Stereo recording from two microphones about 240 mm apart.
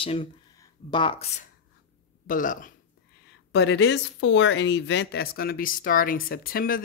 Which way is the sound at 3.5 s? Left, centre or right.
Left.